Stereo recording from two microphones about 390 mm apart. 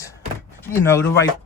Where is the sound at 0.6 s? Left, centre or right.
Centre.